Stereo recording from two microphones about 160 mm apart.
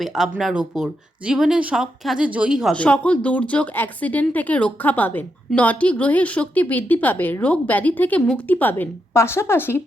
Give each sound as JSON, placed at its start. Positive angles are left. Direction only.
{"t": 0.0, "sound": "speech", "side_deg": 0}
{"t": 2.7, "sound": "a woman's voice", "side_deg": 10}